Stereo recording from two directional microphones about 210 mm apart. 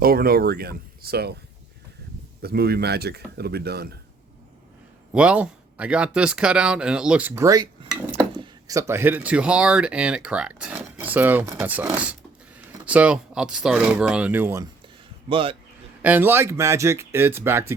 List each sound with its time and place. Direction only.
0.0 s a man's voice: 45° right (ahead or behind)
2.4 s a man's voice: 50° right (ahead or behind)
5.1 s speech: 5° right (ahead or behind)
15.3 s speech: 25° right (ahead or behind)
16.0 s speech: 10° right (ahead or behind)